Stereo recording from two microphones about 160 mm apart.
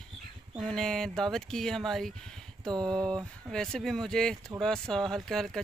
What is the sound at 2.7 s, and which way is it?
Speech, 25° right (ahead or behind).